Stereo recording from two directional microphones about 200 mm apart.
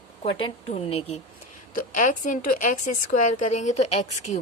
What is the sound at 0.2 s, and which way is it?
A woman's voice, 30° left (ahead or behind).